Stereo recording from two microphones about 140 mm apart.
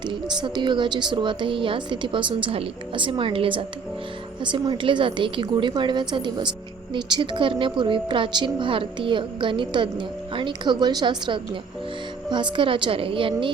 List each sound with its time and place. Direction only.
0.0 s speech: 35° right (ahead or behind)